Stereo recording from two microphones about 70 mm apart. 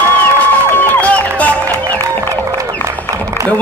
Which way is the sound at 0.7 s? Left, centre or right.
Left.